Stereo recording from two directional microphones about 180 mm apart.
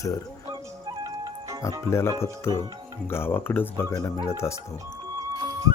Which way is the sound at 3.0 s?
10° left (ahead or behind).